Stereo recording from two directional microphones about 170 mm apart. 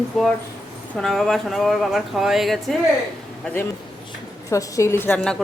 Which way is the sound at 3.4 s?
10° left (ahead or behind).